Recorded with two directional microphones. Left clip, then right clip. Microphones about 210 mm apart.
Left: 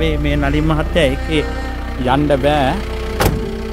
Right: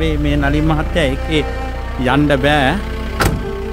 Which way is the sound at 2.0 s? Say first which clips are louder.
Even; 25° right (ahead or behind).